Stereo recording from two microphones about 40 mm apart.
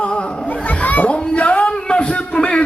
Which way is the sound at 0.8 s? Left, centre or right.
Left.